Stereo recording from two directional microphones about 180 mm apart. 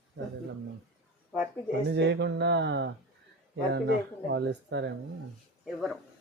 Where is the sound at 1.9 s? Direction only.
75° right (ahead or behind).